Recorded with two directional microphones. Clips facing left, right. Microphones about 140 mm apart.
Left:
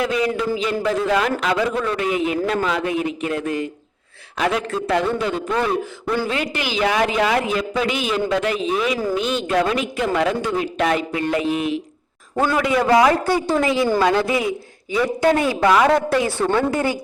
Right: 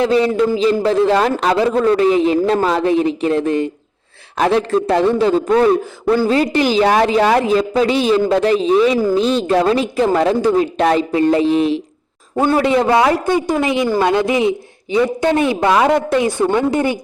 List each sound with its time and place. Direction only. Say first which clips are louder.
0.0 s a man's voice: right 7 dB; 30° right (ahead or behind)